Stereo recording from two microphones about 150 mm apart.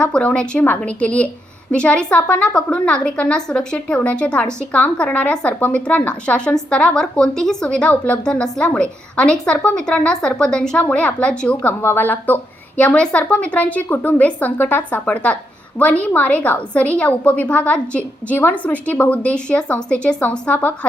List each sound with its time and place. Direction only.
0.0 s a woman's voice: 10° left (ahead or behind)